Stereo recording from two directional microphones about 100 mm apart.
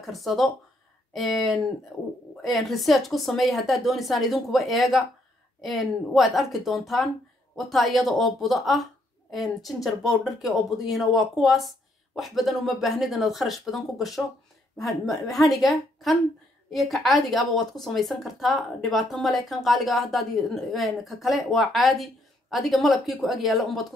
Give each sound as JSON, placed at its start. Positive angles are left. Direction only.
{"t": 0.0, "sound": "speech", "side_deg": 0}